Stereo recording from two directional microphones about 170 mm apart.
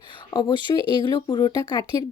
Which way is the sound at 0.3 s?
25° left (ahead or behind).